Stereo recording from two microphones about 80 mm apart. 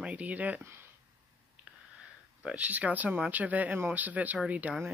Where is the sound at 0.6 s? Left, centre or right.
Right.